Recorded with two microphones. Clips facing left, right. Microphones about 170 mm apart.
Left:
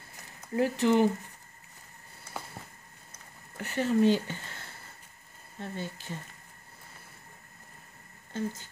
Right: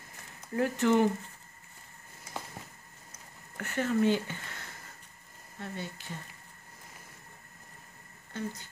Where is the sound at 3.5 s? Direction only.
15° left (ahead or behind).